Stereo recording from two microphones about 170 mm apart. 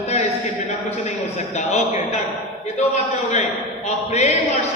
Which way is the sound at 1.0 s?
40° left (ahead or behind).